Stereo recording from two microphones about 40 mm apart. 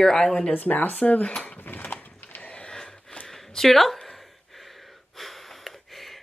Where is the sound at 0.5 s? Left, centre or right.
Left.